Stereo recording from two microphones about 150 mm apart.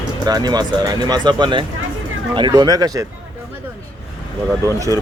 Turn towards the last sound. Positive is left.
turn(degrees=-20)  # may be behind; listen again after turning